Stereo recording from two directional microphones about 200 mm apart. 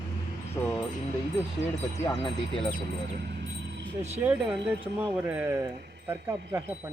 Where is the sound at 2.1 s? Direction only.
25° left (ahead or behind).